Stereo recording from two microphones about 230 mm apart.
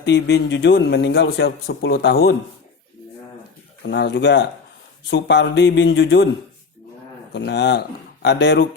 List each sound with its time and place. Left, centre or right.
0.0 s a man's voice: left
3.8 s a man's voice: left
7.3 s a man's voice: left